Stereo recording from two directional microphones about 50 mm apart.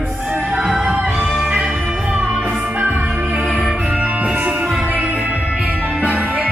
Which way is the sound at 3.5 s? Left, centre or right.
Centre.